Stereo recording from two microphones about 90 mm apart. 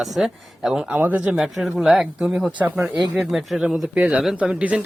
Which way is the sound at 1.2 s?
5° right (ahead or behind).